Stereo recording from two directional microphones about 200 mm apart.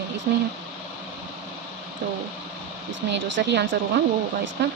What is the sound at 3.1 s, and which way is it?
Speech, 65° right (ahead or behind).